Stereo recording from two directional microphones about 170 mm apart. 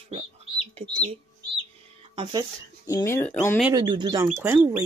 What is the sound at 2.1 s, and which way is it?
Speech, 25° right (ahead or behind).